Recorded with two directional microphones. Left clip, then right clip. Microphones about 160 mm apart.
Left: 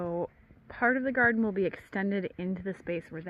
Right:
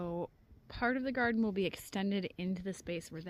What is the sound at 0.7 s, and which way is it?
Speech, 45° right (ahead or behind).